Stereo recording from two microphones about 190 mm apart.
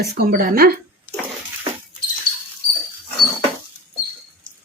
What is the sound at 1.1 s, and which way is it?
Bathtub, 10° right (ahead or behind).